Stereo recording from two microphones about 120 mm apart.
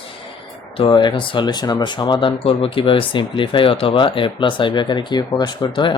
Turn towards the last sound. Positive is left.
turn(degrees=40)  # may be behind; listen again after turning